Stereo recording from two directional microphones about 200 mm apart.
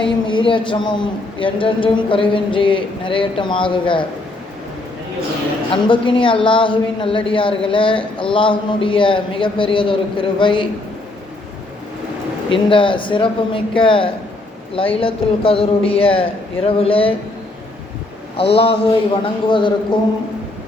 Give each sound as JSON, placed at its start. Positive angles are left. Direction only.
{"t": 0.3, "sound": "a woman's voice", "side_deg": 25}
{"t": 5.7, "sound": "a woman's voice", "side_deg": 25}
{"t": 12.5, "sound": "a woman's voice", "side_deg": 25}
{"t": 18.5, "sound": "a woman's voice", "side_deg": 25}